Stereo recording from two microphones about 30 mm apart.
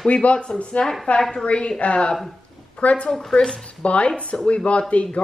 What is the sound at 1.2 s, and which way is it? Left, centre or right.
Speech, centre.